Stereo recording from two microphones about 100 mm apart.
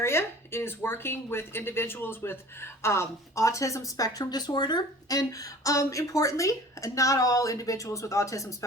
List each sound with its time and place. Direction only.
0.0 s speech: 25° left (ahead or behind)